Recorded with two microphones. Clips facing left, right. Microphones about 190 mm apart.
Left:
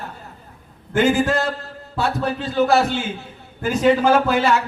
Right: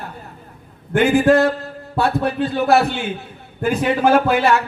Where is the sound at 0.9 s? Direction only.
60° right (ahead or behind).